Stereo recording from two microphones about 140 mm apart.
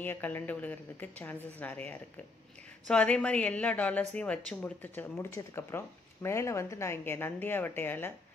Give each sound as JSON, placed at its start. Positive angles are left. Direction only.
{"t": 0.0, "sound": "speech", "side_deg": 15}